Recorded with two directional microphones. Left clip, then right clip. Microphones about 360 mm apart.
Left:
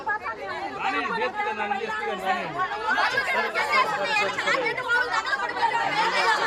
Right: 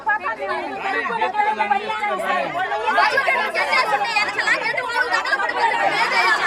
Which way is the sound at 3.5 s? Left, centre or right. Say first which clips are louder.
Right 4 dB; centre.